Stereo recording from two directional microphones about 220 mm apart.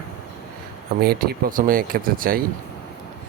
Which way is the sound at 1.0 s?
40° right (ahead or behind).